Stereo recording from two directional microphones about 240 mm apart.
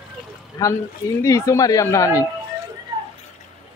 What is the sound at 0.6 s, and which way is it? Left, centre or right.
Speech, centre.